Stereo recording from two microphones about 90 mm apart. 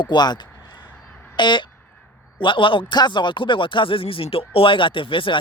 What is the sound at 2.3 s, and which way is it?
Speech, 70° left (ahead or behind).